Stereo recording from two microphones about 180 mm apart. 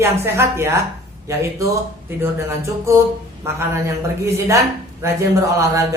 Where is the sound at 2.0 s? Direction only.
15° right (ahead or behind).